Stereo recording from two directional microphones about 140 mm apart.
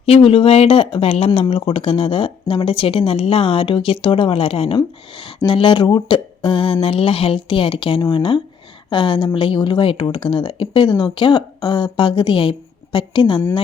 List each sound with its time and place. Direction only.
0.0 s speech: 45° left (ahead or behind)